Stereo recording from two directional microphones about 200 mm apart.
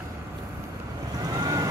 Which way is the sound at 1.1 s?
15° right (ahead or behind).